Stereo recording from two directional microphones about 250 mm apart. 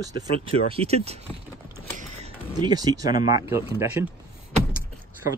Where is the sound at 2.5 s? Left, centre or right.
Centre.